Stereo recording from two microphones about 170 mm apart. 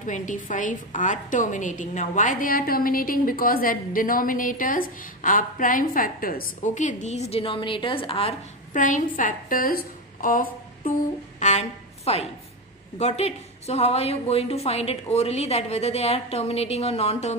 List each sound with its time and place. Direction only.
0.0 s a woman's voice: 50° left (ahead or behind)
8.7 s a woman's voice: 50° left (ahead or behind)